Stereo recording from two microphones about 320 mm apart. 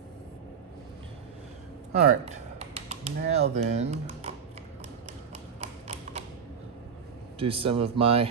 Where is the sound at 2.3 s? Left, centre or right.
Centre.